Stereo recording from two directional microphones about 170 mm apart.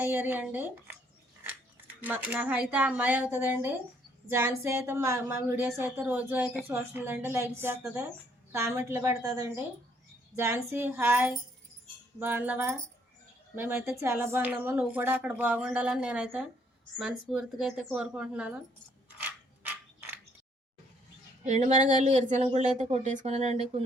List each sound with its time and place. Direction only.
0.0 s a woman's voice: 10° right (ahead or behind)
2.0 s a woman's voice: 10° right (ahead or behind)
19.2 s mechanisms: 10° right (ahead or behind)
21.4 s speech: 45° right (ahead or behind)